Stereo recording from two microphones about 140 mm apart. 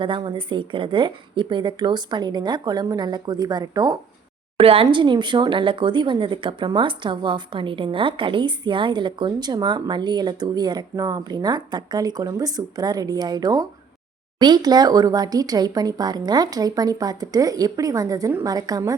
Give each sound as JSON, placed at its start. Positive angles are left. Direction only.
{"t": 0.0, "sound": "speech", "side_deg": -35}
{"t": 4.5, "sound": "speech", "side_deg": -40}